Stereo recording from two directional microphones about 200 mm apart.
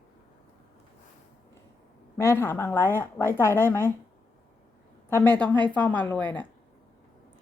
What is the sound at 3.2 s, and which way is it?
Speech, 5° left (ahead or behind).